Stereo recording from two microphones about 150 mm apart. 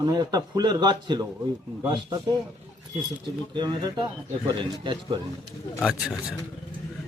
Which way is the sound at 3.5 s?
30° right (ahead or behind).